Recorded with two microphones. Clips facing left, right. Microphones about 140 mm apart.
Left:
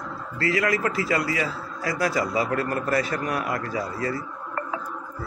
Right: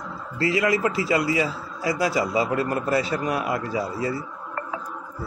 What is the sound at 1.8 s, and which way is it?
Speech, 15° right (ahead or behind).